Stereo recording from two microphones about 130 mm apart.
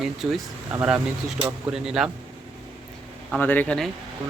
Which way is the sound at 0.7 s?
15° right (ahead or behind).